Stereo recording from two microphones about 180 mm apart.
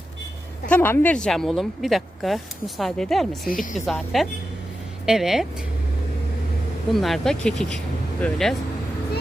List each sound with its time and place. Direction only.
0.7 s a woman's voice: 10° left (ahead or behind)
3.5 s speech: 45° left (ahead or behind)
3.8 s a woman's voice: centre (ahead or behind)
6.9 s a woman's voice: centre (ahead or behind)